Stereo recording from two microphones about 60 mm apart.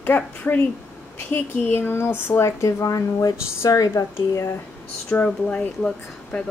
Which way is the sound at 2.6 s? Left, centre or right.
Left.